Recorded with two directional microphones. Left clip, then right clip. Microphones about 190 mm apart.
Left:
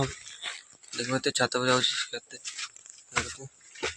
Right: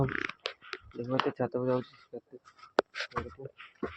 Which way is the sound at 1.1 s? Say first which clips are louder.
Left 3 dB; 20° left (ahead or behind).